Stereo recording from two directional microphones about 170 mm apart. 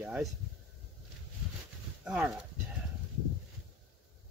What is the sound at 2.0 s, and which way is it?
Speech, 5° right (ahead or behind).